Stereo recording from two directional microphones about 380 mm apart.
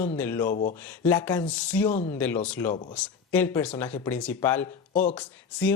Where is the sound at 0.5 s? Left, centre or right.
Centre.